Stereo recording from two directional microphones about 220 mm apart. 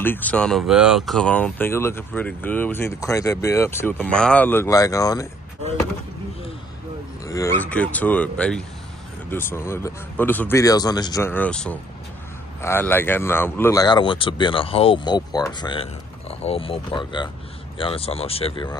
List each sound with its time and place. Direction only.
0.0 s speech: 10° left (ahead or behind)
7.2 s speech: 15° left (ahead or behind)